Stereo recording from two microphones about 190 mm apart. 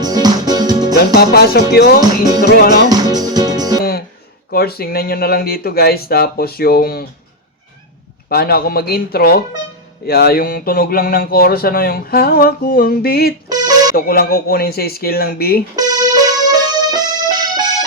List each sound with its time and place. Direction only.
0.0 s music: 20° right (ahead or behind)
0.9 s speech: 55° left (ahead or behind)
2.9 s music: 20° right (ahead or behind)
4.5 s speech: 55° left (ahead or behind)
8.3 s speech: 55° left (ahead or behind)
13.5 s music: 20° right (ahead or behind)
13.9 s speech: 50° left (ahead or behind)
15.7 s music: 20° right (ahead or behind)